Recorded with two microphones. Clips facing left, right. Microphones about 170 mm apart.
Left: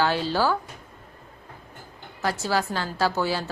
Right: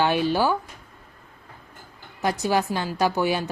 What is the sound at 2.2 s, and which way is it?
A woman's voice, 15° right (ahead or behind).